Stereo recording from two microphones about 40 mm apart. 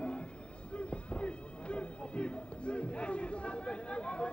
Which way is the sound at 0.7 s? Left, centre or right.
Left.